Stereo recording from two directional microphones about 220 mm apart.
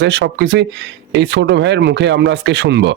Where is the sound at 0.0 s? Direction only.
50° right (ahead or behind).